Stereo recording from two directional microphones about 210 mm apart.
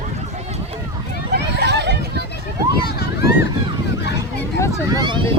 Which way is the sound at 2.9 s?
50° left (ahead or behind).